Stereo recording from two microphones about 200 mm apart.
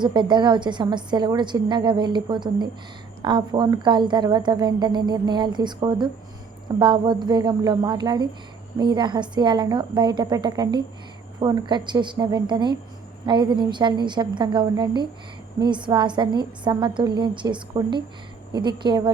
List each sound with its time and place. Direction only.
0.0 s a woman's voice: 25° right (ahead or behind)